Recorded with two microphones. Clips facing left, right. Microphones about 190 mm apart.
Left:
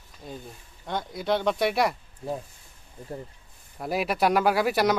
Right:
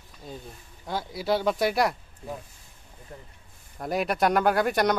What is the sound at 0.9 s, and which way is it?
Speech, 5° right (ahead or behind).